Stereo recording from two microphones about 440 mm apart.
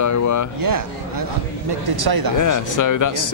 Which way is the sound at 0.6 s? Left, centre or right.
Right.